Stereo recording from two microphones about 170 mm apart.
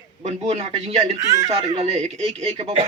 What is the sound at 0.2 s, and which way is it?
Speech, 40° right (ahead or behind).